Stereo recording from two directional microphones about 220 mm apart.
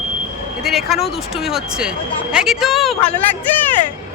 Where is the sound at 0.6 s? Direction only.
Centre (ahead or behind).